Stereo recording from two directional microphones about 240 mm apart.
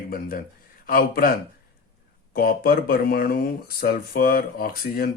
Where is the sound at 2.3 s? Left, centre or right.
Left.